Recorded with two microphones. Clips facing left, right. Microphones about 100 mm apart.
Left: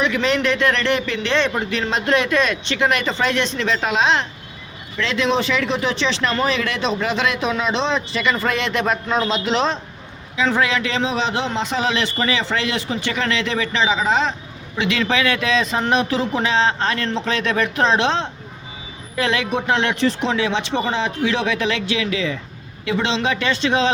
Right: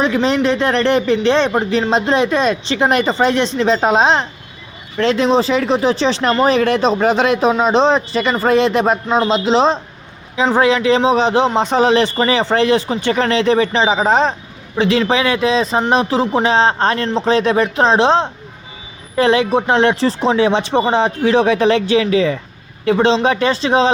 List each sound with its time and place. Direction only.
0.0 s a man's voice: 30° right (ahead or behind)
14.8 s speech: 30° right (ahead or behind)